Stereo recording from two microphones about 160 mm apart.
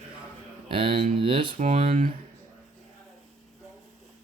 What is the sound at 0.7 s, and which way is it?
Speech, 35° right (ahead or behind).